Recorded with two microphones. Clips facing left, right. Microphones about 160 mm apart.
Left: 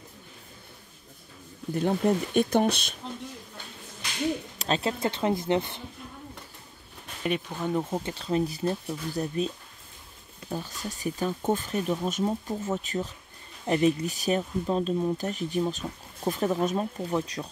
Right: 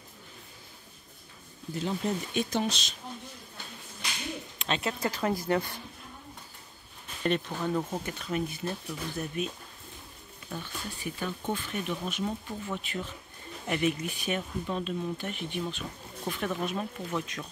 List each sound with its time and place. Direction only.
1.8 s speech: 55° left (ahead or behind)
4.6 s speech: 35° left (ahead or behind)
7.2 s speech: 10° left (ahead or behind); by 9.5 s 35° left (ahead or behind)
10.5 s speech: 40° left (ahead or behind)